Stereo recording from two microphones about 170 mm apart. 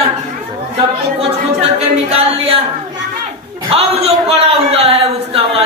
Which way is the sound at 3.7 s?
35° right (ahead or behind).